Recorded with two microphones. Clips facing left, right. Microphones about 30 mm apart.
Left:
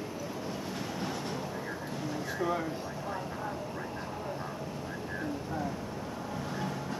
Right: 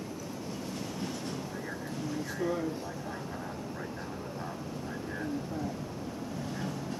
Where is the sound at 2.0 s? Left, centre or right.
Centre.